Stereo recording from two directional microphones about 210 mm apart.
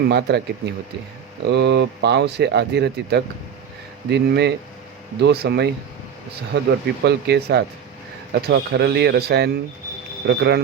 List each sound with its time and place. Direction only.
0.1 s speech: 50° right (ahead or behind)